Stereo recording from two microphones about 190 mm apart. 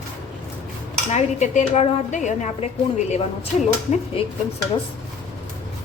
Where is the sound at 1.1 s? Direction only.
35° left (ahead or behind).